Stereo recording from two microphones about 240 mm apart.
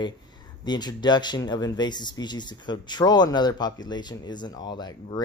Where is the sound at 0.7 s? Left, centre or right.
Centre.